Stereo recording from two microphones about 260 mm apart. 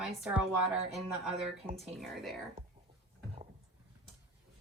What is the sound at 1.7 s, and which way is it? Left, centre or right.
Speech, right.